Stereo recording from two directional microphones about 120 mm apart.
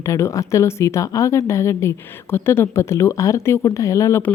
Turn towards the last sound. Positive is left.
turn(degrees=25)  # may be behind; listen again after turning